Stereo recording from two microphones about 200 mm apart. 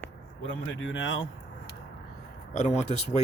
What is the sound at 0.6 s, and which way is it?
Speech, 70° left (ahead or behind).